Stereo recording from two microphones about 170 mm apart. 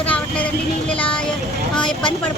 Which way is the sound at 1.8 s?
25° left (ahead or behind).